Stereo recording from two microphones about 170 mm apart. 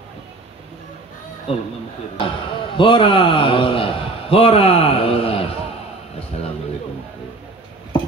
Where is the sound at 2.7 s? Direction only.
30° left (ahead or behind).